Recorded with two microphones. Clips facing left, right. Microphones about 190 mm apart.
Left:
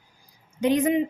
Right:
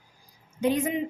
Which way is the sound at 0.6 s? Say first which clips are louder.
Left 4 dB; 75° left (ahead or behind).